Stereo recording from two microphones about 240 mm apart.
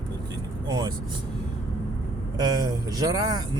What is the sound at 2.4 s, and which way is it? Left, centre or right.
Speech, centre.